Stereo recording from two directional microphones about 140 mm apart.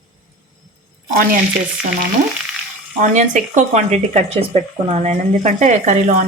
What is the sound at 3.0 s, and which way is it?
Speech, 60° right (ahead or behind).